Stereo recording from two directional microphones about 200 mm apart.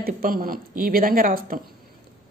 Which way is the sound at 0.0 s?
45° right (ahead or behind).